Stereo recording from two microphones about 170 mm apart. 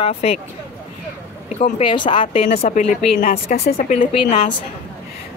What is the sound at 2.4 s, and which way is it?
A woman's voice, 50° left (ahead or behind).